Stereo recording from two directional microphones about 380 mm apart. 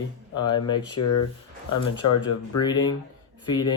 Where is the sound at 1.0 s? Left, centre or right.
Left.